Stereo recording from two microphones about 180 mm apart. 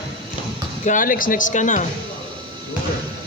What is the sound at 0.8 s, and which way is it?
Speech, 45° left (ahead or behind).